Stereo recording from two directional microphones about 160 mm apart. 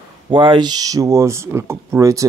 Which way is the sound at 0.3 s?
30° right (ahead or behind).